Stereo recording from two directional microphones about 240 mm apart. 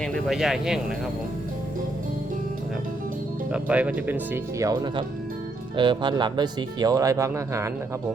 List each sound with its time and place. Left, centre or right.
0.0 s speech: centre
3.5 s speech: centre